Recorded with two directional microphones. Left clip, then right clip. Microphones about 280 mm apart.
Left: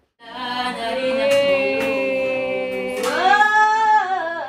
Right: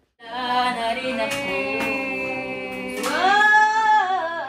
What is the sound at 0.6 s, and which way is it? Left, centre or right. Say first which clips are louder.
Chant: left 1 dB; left.